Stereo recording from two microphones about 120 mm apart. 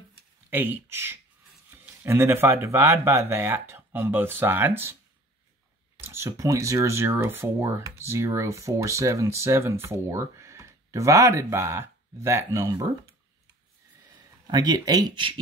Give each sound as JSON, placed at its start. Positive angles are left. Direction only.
{"t": 0.5, "sound": "speech", "side_deg": -15}
{"t": 6.0, "sound": "speech", "side_deg": -20}
{"t": 14.5, "sound": "speech", "side_deg": -35}